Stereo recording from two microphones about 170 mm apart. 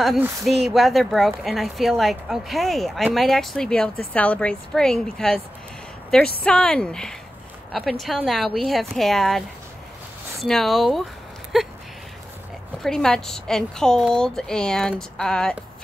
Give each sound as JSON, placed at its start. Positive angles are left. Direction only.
{"t": 0.5, "sound": "speech", "side_deg": 0}
{"t": 10.4, "sound": "speech", "side_deg": 0}
{"t": 12.8, "sound": "speech", "side_deg": 5}